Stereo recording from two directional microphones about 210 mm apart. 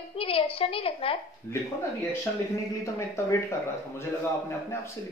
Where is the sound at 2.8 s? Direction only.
10° left (ahead or behind).